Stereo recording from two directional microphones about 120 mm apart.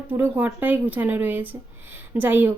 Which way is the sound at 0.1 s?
15° right (ahead or behind).